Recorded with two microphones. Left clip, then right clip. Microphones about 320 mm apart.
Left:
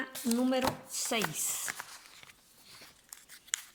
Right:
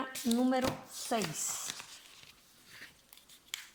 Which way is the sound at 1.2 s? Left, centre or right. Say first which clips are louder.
Left 3 dB; centre.